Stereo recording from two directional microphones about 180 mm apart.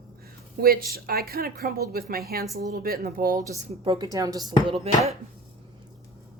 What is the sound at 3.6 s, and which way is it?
Speech, 30° right (ahead or behind).